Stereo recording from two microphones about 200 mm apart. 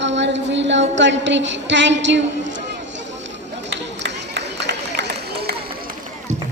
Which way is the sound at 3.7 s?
60° right (ahead or behind).